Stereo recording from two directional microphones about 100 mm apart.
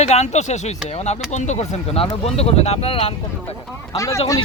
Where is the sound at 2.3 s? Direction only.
90° left.